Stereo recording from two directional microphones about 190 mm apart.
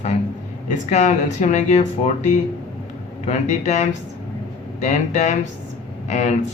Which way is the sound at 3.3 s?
35° left (ahead or behind).